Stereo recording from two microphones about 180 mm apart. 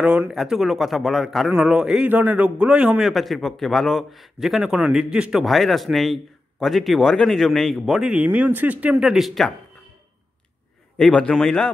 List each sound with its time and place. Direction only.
0.0 s a man's voice: 5° right (ahead or behind)
11.0 s a man's voice: 5° left (ahead or behind)